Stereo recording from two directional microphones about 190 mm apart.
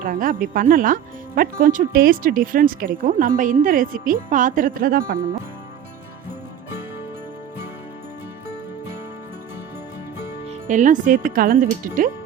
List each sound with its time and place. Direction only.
0.0 s speech: 45° right (ahead or behind)
10.7 s speech: 40° right (ahead or behind)